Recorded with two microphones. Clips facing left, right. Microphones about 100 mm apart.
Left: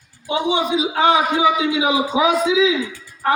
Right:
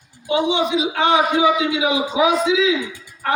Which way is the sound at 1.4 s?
25° left (ahead or behind).